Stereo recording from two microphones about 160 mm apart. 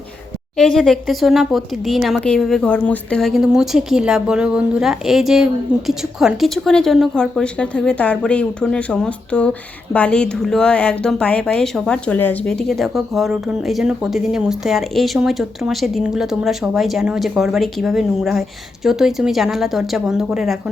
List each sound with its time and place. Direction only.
0.5 s speech: 5° left (ahead or behind)